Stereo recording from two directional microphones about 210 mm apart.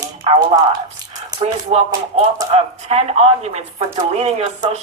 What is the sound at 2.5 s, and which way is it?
Speech, 30° right (ahead or behind).